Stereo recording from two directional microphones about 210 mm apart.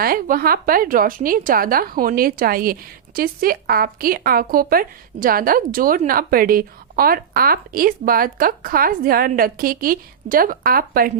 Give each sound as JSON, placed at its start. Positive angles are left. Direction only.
{"t": 0.0, "sound": "a woman's voice", "side_deg": -45}